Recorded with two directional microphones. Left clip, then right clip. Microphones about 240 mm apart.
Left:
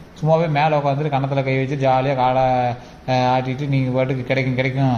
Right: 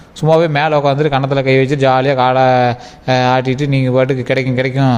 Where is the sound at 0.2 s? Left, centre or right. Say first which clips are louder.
Right 6 dB; right.